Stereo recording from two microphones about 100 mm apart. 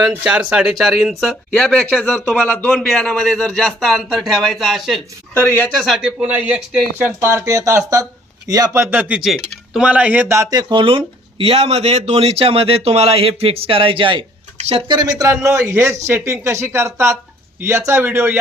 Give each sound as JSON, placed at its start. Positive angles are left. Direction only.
{"t": 0.1, "sound": "speech", "side_deg": -10}
{"t": 1.5, "sound": "a man's voice", "side_deg": 5}
{"t": 2.7, "sound": "speech", "side_deg": 5}
{"t": 5.3, "sound": "speech", "side_deg": 20}
{"t": 5.7, "sound": "speech", "side_deg": 5}
{"t": 6.0, "sound": "speech", "side_deg": -10}
{"t": 7.0, "sound": "speech", "side_deg": -25}
{"t": 8.8, "sound": "speech", "side_deg": -20}
{"t": 9.2, "sound": "speech", "side_deg": -5}
{"t": 10.5, "sound": "speech", "side_deg": -40}
{"t": 10.8, "sound": "speech", "side_deg": -65}
{"t": 14.8, "sound": "speech", "side_deg": -45}
{"t": 15.5, "sound": "speech", "side_deg": -25}